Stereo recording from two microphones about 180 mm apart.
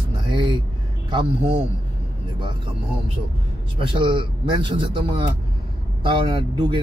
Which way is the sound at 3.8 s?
30° right (ahead or behind).